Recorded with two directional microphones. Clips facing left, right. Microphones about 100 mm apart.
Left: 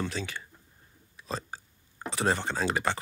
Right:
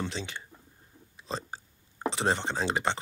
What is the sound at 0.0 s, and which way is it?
Speech, 25° right (ahead or behind).